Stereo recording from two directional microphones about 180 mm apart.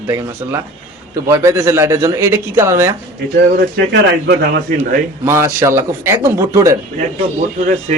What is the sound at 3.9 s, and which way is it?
Speech, 65° right (ahead or behind).